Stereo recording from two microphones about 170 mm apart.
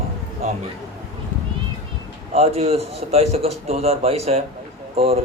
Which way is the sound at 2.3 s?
35° right (ahead or behind).